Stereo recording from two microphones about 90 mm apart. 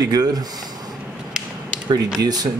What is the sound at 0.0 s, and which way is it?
Speech, 45° right (ahead or behind).